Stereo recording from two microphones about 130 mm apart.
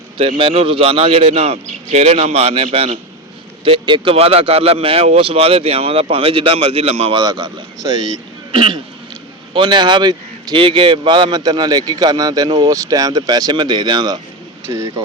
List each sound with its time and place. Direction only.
0.2 s speech: 40° right (ahead or behind)
7.2 s speech: 35° right (ahead or behind)
14.7 s speech: 25° right (ahead or behind)